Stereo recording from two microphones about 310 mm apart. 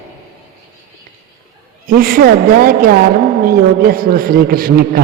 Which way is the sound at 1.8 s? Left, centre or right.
Right.